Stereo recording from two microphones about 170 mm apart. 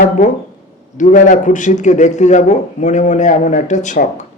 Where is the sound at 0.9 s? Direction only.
45° left (ahead or behind).